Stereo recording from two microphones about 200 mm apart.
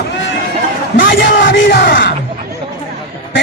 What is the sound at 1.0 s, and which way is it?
Bellow, 65° left (ahead or behind).